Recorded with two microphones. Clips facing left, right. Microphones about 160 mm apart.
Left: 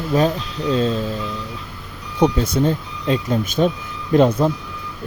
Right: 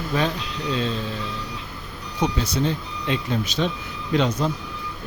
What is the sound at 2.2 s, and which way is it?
Speech, 50° left (ahead or behind).